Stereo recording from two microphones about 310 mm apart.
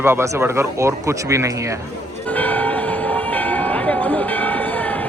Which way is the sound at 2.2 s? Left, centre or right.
Centre.